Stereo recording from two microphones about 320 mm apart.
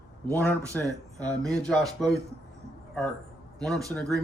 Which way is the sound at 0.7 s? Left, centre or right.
Centre.